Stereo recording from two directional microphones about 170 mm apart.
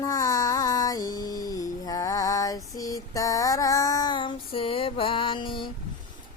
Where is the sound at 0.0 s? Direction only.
20° left (ahead or behind).